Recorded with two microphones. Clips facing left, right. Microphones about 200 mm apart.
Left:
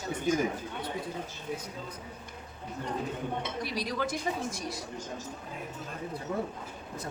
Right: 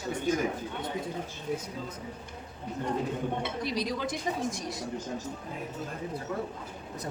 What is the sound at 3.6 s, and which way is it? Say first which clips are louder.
Speech: right 1 dB; 20° right (ahead or behind).